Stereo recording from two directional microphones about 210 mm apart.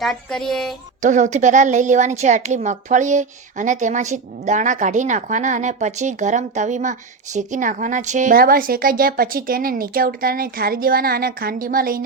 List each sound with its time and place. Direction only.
0.0 s speech: centre (ahead or behind)
1.0 s a woman's voice: 35° right (ahead or behind)